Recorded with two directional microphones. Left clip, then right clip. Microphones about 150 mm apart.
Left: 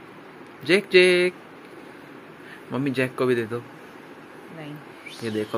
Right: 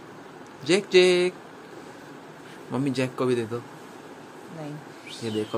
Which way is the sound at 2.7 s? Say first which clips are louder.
Left 2 dB; 5° right (ahead or behind).